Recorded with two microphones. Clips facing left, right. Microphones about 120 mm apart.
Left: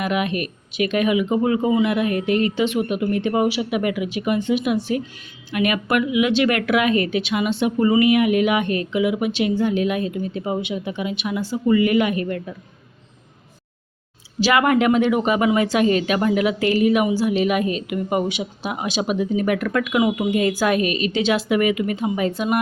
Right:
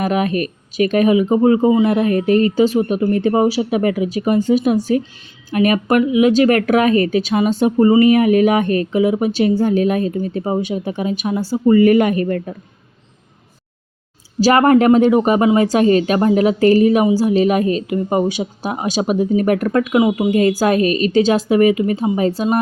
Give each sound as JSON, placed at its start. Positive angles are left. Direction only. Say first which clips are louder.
{"t": 0.0, "sound": "speech", "louder": "right 5 dB", "side_deg": -40}
{"t": 14.3, "sound": "speech", "louder": "right 6 dB", "side_deg": -40}